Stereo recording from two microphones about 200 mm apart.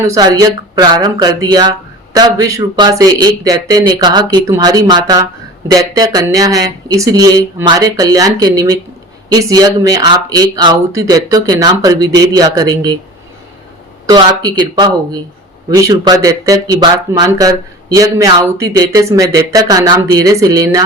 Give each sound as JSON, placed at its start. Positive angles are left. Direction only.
{"t": 0.0, "sound": "speech", "side_deg": -20}
{"t": 14.1, "sound": "speech", "side_deg": -20}